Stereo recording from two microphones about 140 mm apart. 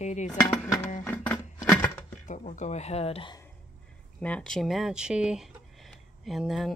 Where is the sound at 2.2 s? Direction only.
65° left (ahead or behind); by 3.3 s 40° left (ahead or behind).